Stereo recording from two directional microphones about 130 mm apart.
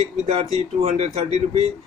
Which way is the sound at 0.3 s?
55° right (ahead or behind).